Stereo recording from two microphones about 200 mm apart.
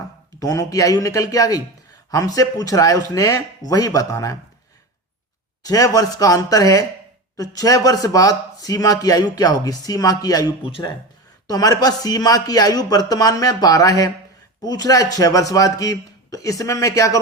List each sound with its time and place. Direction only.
0.3 s a man's voice: 15° left (ahead or behind)
5.6 s a man's voice: 20° left (ahead or behind)